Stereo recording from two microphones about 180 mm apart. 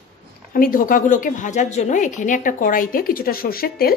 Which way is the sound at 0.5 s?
50° left (ahead or behind).